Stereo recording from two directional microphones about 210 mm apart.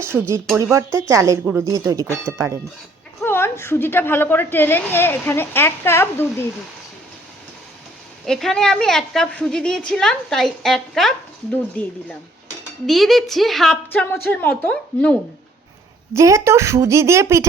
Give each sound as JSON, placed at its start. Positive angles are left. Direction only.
{"t": 0.0, "sound": "speech", "side_deg": -10}
{"t": 3.2, "sound": "a woman's voice", "side_deg": 10}
{"t": 8.3, "sound": "a woman's voice", "side_deg": 0}
{"t": 16.1, "sound": "speech", "side_deg": -15}